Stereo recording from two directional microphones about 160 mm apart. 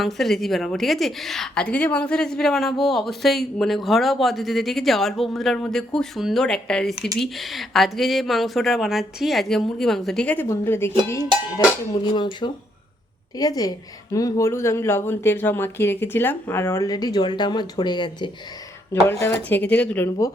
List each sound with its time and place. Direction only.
0.0 s a woman's voice: centre (ahead or behind)
12.0 s speech: 30° left (ahead or behind)
19.0 s speech: 15° left (ahead or behind)